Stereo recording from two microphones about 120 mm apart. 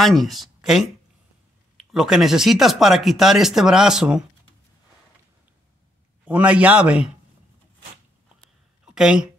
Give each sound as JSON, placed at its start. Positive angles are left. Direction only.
{"t": 0.0, "sound": "speech", "side_deg": 0}
{"t": 1.9, "sound": "speech", "side_deg": -5}
{"t": 6.2, "sound": "a man's voice", "side_deg": -10}
{"t": 8.8, "sound": "a woman's voice", "side_deg": -5}